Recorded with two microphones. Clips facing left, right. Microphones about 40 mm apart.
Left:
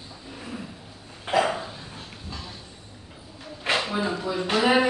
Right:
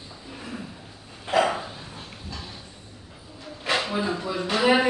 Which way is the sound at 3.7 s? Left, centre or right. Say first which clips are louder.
Even; left.